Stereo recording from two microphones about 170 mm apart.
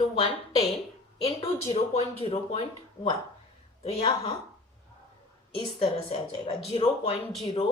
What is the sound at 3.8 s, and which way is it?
Speech, 35° left (ahead or behind).